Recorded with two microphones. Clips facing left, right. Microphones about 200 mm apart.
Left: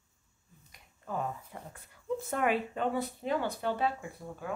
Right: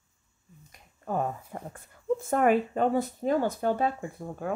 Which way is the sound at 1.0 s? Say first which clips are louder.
Right 6 dB; 50° right (ahead or behind).